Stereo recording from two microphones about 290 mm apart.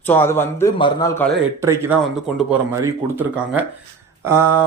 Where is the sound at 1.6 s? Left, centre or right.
Centre.